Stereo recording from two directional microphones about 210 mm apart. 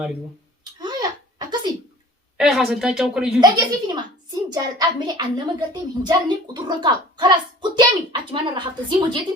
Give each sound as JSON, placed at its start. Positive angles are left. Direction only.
{"t": 0.6, "sound": "a sound", "side_deg": -20}
{"t": 2.4, "sound": "speech", "side_deg": 0}
{"t": 3.4, "sound": "a child's voice", "side_deg": -20}